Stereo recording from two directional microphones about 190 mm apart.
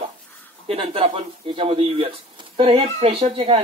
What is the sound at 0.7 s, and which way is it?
Speech, 30° right (ahead or behind).